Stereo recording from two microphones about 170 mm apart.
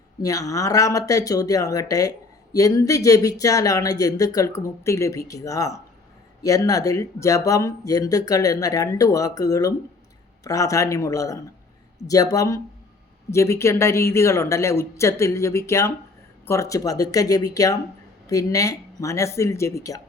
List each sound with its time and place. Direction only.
0.2 s speech: 20° left (ahead or behind)